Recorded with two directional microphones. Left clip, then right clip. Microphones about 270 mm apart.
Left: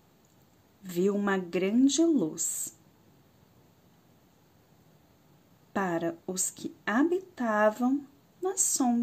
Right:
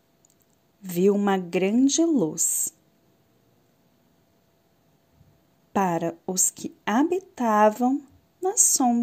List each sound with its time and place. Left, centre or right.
0.8 s a woman's voice: right
5.7 s a woman's voice: right